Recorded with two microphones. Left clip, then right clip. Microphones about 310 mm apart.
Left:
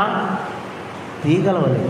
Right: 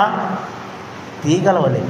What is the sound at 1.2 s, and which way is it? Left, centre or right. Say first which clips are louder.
Speech: right 3 dB; right.